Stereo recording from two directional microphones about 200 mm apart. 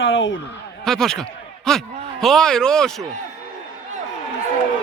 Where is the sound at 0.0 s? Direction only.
70° left (ahead or behind).